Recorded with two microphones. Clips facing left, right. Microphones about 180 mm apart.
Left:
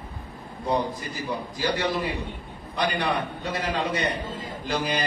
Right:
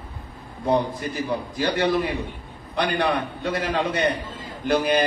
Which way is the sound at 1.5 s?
60° right (ahead or behind).